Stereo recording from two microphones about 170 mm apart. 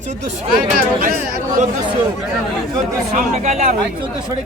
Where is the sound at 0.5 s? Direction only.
55° right (ahead or behind).